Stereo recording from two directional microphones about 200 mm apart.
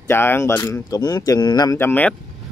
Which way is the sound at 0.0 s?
10° left (ahead or behind).